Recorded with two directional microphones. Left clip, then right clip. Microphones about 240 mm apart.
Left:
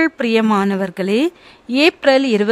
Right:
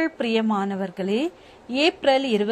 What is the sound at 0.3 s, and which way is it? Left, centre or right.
Speech, left.